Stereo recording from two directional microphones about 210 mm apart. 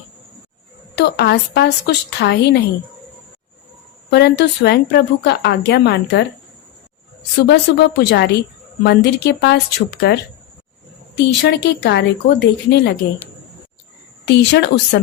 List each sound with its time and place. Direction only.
0.9 s a woman's voice: 55° left (ahead or behind)
4.1 s a woman's voice: 55° left (ahead or behind)
7.4 s a woman's voice: 55° left (ahead or behind)
11.2 s a woman's voice: 55° left (ahead or behind)
14.3 s a woman's voice: 55° left (ahead or behind)